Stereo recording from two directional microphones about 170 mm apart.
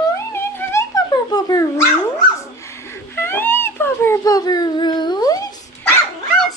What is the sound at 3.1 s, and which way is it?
Baby cry, 15° left (ahead or behind).